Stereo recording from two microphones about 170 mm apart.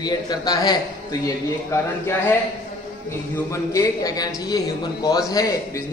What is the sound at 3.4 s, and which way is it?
A man's voice, 20° left (ahead or behind).